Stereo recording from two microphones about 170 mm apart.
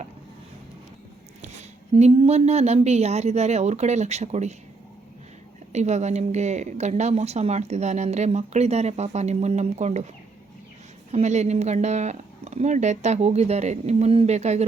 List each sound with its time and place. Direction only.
1.4 s a woman's voice: 40° right (ahead or behind)
5.7 s a woman's voice: 40° right (ahead or behind)
11.1 s a woman's voice: 40° right (ahead or behind)